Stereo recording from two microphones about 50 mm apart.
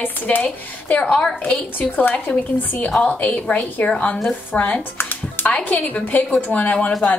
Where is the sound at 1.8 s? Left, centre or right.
Left.